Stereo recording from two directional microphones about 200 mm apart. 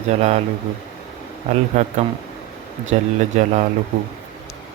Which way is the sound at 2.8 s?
35° right (ahead or behind).